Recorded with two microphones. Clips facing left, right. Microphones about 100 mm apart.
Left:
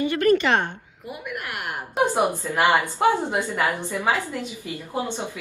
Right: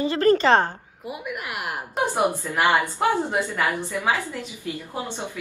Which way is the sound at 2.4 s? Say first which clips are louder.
Left 1 dB; 15° left (ahead or behind).